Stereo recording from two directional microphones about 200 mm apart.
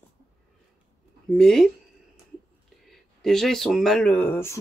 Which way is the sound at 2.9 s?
Centre (ahead or behind).